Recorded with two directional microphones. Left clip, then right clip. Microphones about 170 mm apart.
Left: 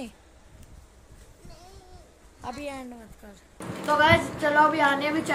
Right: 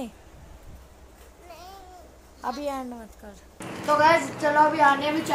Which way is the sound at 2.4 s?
5° right (ahead or behind).